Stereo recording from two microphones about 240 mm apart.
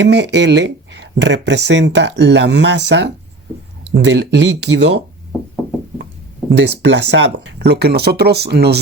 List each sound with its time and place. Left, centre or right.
0.0 s speech: right
6.6 s speech: right